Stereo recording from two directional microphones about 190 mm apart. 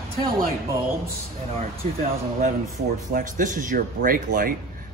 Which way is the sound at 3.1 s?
45° right (ahead or behind).